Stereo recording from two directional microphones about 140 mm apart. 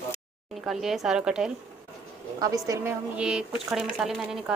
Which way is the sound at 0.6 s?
Centre (ahead or behind).